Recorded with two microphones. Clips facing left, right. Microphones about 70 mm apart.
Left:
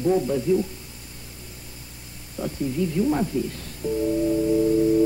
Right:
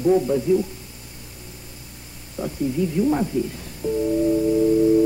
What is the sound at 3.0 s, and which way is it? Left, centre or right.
Speech, centre.